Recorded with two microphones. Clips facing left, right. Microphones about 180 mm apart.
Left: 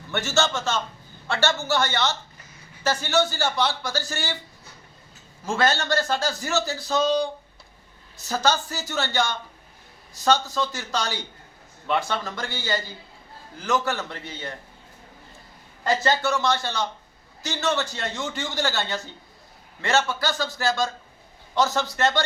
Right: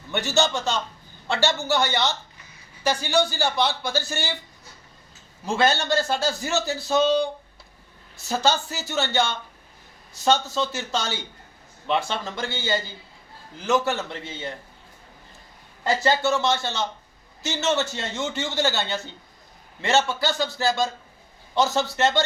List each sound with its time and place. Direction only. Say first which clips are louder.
0.1 s speech: right 1 dB; 15° right (ahead or behind)
5.5 s a man's voice: right 1 dB; 20° right (ahead or behind)
8.3 s a man's voice: right 1 dB; 20° right (ahead or behind)
10.2 s a man's voice: even; 20° right (ahead or behind)
15.8 s a man's voice: right 1 dB; 20° right (ahead or behind)